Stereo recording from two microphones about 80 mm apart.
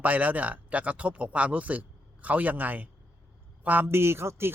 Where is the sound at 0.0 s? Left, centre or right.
Centre.